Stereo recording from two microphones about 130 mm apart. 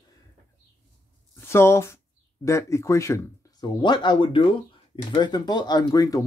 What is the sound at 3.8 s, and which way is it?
Speech, 35° left (ahead or behind).